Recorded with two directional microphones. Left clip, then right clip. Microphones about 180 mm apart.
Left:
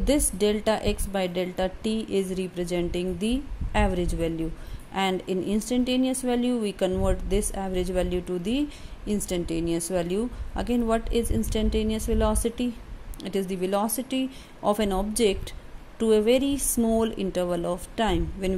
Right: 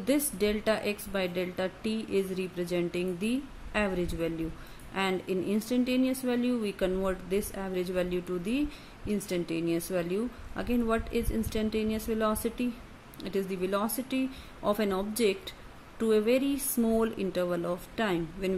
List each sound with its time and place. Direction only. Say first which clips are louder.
0.0 s speech: left 5 dB; 20° left (ahead or behind)